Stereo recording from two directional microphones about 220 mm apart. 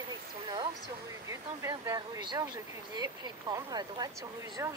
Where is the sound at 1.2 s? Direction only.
15° right (ahead or behind).